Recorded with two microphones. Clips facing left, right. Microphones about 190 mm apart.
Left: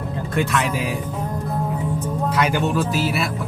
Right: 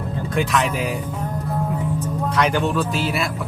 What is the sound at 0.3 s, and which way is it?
Speech, centre (ahead or behind).